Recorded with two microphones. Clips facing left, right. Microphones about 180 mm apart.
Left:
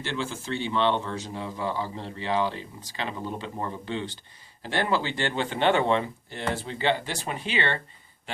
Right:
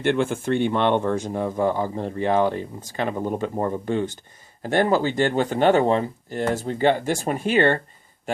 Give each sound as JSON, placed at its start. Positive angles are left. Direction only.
{"t": 0.0, "sound": "speech", "side_deg": -55}